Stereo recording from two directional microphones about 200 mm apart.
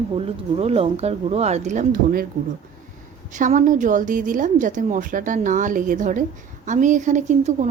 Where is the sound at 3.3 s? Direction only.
40° right (ahead or behind).